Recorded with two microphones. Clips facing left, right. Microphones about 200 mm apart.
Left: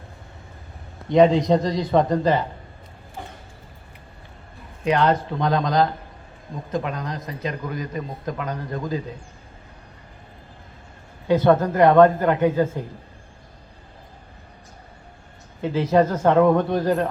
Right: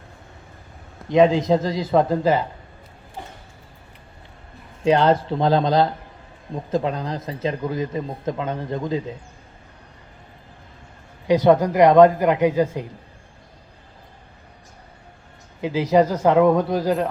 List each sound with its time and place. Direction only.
1.0 s a man's voice: centre (ahead or behind)
4.8 s speech: 30° right (ahead or behind)
11.3 s speech: 15° right (ahead or behind)
15.6 s speech: 10° right (ahead or behind)